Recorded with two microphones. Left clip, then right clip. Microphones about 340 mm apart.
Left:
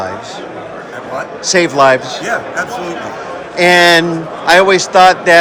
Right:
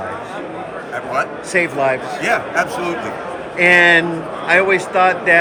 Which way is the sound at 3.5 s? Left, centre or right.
Centre.